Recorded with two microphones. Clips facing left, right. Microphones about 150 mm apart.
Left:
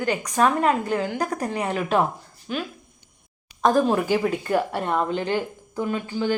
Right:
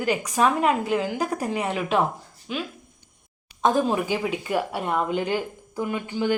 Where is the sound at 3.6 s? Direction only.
Centre (ahead or behind).